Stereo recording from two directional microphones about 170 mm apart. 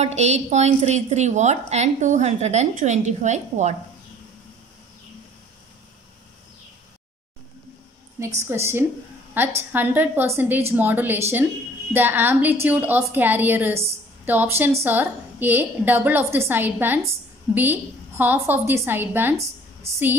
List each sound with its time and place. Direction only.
0.0 s a woman's voice: 40° right (ahead or behind)
8.5 s a woman's voice: 15° right (ahead or behind)